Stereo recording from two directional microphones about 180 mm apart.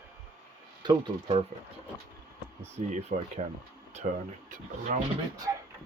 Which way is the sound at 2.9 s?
40° right (ahead or behind).